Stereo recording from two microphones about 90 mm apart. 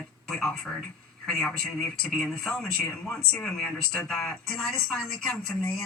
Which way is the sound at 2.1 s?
10° left (ahead or behind).